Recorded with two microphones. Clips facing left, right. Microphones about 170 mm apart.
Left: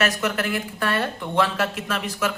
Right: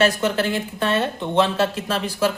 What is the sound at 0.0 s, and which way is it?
Speech, 30° right (ahead or behind).